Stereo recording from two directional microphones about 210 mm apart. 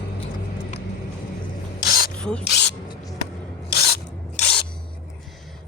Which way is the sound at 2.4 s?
55° left (ahead or behind).